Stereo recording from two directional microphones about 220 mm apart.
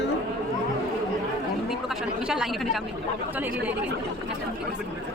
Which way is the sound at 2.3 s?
Centre (ahead or behind).